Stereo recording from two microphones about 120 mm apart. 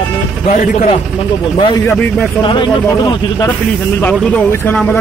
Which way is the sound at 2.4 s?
40° left (ahead or behind).